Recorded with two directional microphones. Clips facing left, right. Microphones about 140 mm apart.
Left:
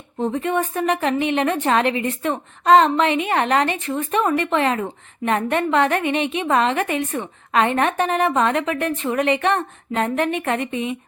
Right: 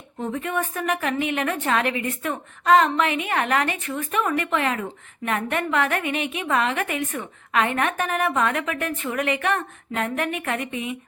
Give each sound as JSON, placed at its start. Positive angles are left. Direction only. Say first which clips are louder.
{"t": 0.2, "sound": "a woman's voice", "louder": "left 5 dB", "side_deg": 30}